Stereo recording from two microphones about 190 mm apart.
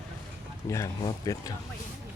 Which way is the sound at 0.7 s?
15° left (ahead or behind).